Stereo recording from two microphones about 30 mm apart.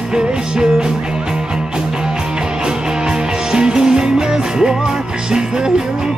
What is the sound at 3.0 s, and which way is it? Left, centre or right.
Music, right.